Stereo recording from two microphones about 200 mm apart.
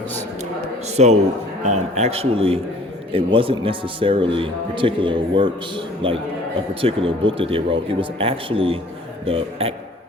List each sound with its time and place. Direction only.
0.9 s a man's voice: 35° right (ahead or behind)